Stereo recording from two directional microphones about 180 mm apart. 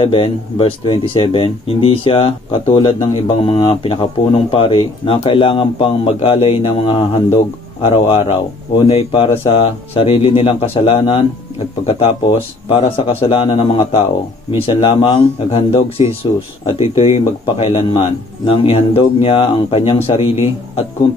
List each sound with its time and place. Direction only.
0.0 s speech: 30° left (ahead or behind)